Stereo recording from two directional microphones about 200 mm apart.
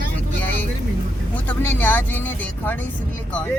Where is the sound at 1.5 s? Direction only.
10° left (ahead or behind).